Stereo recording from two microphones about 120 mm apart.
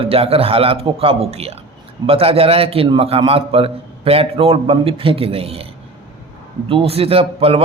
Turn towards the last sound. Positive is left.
turn(degrees=-55)  # may be behind; listen again after turning